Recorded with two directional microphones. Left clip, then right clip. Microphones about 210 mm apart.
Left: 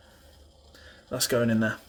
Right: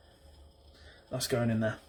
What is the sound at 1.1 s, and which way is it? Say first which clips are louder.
Speech: left 6 dB; 40° left (ahead or behind).